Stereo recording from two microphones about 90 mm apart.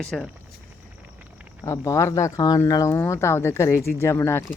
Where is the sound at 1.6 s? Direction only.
35° left (ahead or behind).